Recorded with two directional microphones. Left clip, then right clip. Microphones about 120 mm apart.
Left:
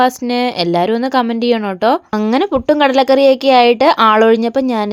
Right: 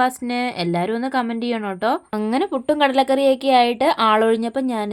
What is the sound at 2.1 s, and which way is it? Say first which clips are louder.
A woman's voice: left 7 dB; 40° left (ahead or behind).